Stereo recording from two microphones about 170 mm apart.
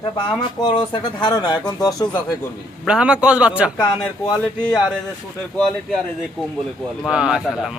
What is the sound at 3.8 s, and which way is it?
Speech, 25° left (ahead or behind).